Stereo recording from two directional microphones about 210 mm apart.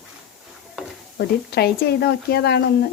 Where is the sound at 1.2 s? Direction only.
50° left (ahead or behind).